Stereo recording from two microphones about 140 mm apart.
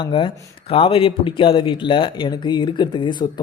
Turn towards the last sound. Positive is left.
turn(degrees=35)  # may be behind; listen again after turning